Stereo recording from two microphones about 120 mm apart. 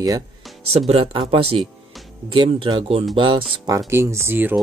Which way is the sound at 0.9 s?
55° right (ahead or behind).